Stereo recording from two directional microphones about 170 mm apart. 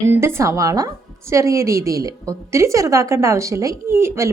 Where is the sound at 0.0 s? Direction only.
15° right (ahead or behind).